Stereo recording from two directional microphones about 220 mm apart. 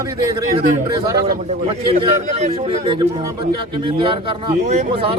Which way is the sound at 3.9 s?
25° right (ahead or behind).